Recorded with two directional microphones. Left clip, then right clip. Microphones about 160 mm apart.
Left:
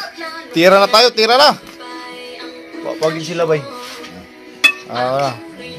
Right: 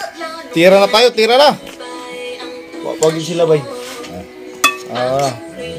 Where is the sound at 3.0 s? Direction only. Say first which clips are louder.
Right 4 dB; 20° left (ahead or behind).